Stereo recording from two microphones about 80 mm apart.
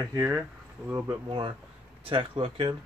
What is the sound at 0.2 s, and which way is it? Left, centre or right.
Speech, right.